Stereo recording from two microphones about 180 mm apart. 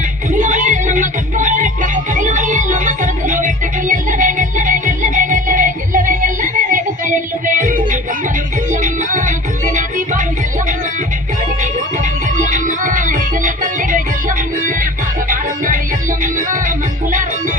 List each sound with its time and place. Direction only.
0.3 s music: 45° right (ahead or behind)
12.4 s music: 45° right (ahead or behind)
15.3 s music: 50° right (ahead or behind)